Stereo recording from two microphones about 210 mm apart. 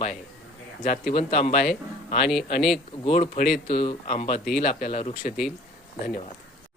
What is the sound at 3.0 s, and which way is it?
A man's voice, 30° left (ahead or behind).